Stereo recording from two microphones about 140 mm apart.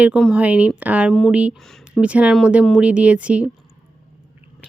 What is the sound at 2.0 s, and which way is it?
Speech, 10° right (ahead or behind).